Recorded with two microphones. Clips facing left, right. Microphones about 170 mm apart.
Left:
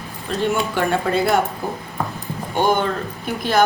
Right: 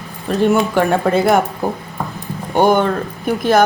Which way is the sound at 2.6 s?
45° right (ahead or behind).